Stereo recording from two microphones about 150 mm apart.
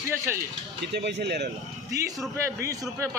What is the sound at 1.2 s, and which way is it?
Speech, 90° right.